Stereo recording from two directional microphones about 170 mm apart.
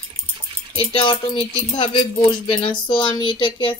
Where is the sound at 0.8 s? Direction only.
30° left (ahead or behind).